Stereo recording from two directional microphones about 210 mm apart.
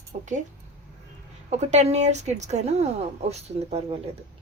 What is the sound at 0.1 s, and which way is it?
Speech, 35° right (ahead or behind).